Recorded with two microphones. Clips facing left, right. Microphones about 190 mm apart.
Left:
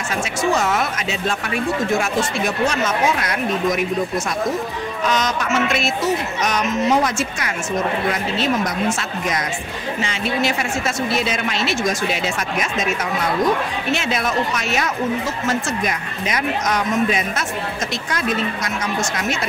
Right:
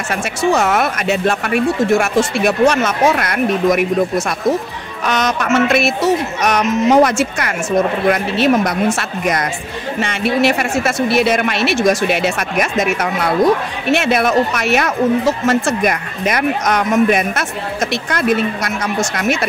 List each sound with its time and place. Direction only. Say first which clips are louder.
0.1 s speech: right 4 dB; 65° right (ahead or behind)
5.0 s speech: right 4 dB; 65° right (ahead or behind)